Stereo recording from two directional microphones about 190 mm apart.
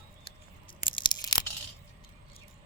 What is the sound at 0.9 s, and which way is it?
Tearing, 20° left (ahead or behind).